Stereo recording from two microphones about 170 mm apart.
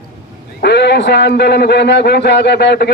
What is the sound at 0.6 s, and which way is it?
A man's voice, 90° left.